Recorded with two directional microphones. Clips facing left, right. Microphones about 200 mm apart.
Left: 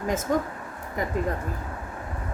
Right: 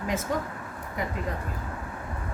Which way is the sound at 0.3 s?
45° left (ahead or behind).